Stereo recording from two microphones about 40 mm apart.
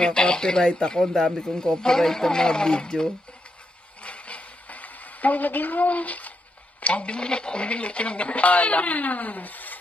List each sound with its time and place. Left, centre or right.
0.0 s speech: left
4.0 s a sound: left
6.8 s speech: left